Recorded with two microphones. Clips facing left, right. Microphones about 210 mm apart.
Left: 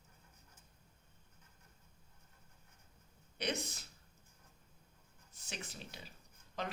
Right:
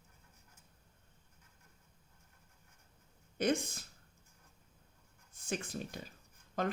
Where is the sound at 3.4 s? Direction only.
50° right (ahead or behind).